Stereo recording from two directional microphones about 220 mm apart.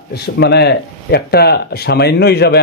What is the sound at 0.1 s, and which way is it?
A man's voice, 50° left (ahead or behind).